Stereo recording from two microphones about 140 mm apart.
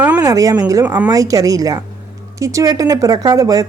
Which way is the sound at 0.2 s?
25° right (ahead or behind).